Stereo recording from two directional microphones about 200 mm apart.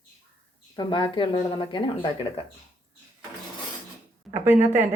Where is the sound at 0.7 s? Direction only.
25° left (ahead or behind).